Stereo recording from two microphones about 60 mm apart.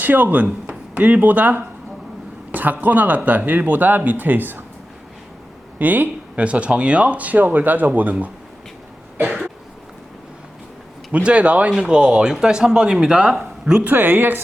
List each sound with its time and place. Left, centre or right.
0.0 s speech: right
5.8 s speech: right
11.1 s speech: centre
13.7 s speech: right